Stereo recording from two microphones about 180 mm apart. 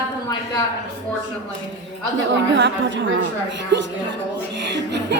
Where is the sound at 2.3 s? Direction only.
80° right.